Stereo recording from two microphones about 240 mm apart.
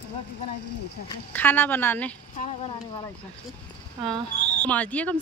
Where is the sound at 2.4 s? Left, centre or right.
Left.